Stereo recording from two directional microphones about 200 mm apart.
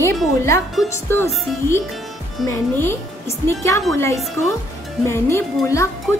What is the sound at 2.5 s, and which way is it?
A woman's voice, 15° left (ahead or behind).